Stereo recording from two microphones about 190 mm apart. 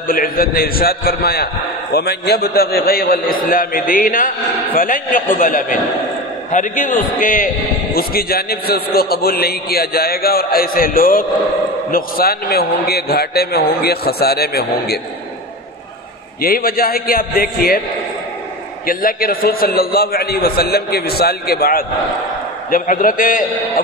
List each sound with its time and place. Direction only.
0.1 s a man's voice: 50° left (ahead or behind)
16.3 s a man's voice: 50° left (ahead or behind)
18.9 s a man's voice: 50° left (ahead or behind)